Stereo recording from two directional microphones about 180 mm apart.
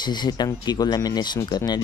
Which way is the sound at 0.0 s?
25° left (ahead or behind).